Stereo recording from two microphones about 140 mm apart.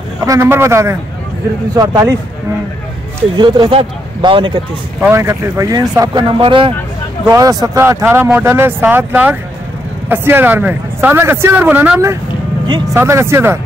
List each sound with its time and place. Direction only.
0.2 s speech: 20° right (ahead or behind)
3.3 s speech: 35° right (ahead or behind)
5.0 s speech: 20° right (ahead or behind); by 6.7 s 40° right (ahead or behind)
7.2 s speech: 25° right (ahead or behind)